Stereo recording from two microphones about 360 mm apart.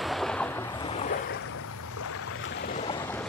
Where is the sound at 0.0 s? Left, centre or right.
Centre.